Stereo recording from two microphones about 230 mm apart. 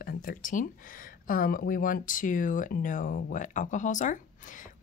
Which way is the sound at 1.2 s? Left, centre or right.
Left.